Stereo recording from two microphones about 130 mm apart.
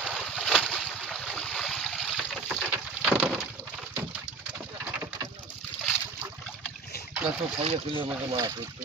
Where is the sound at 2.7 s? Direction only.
10° right (ahead or behind).